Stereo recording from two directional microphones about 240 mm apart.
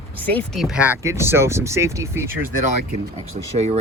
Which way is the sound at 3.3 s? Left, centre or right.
Right.